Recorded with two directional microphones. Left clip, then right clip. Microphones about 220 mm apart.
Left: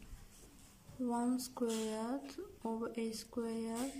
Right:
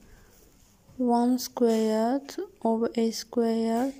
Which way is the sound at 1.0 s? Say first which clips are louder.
Right 13 dB; 30° right (ahead or behind).